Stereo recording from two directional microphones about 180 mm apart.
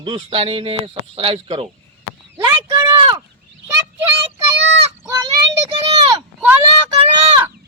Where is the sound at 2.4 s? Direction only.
15° right (ahead or behind).